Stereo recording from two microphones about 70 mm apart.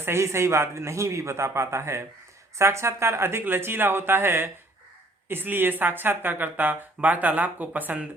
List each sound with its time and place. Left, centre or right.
0.0 s a man's voice: right